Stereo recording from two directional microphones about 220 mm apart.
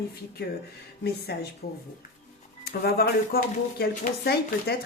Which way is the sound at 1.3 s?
45° left (ahead or behind).